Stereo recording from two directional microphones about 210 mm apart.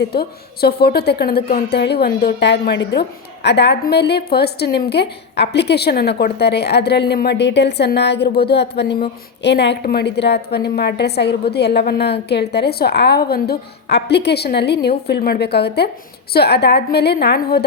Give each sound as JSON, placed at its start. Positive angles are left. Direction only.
{"t": 0.0, "sound": "a woman's voice", "side_deg": 50}